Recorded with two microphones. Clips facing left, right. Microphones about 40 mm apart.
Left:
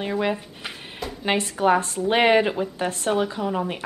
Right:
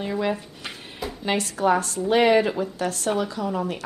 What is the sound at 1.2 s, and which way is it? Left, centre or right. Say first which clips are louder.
A woman's voice: left 2 dB; left.